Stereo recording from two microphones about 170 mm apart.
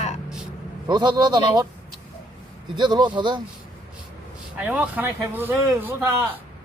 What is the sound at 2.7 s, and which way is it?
Speech, 25° right (ahead or behind).